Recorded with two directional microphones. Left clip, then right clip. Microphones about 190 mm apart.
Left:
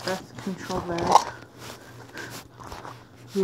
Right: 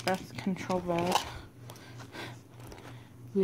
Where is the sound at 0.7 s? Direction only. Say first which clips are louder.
Left 6 dB; 5° right (ahead or behind).